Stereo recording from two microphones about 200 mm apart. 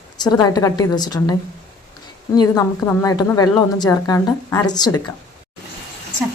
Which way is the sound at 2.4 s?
15° left (ahead or behind).